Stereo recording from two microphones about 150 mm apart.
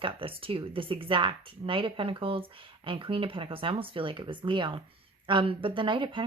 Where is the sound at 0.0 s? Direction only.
35° right (ahead or behind).